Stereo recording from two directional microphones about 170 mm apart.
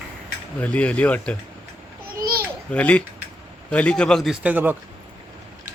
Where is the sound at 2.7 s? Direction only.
10° left (ahead or behind); by 4.8 s 10° right (ahead or behind).